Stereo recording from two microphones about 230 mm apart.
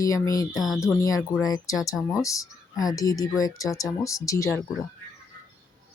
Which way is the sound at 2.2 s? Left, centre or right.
Centre.